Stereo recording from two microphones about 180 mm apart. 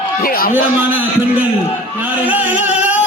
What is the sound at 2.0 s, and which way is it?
Music, 10° right (ahead or behind).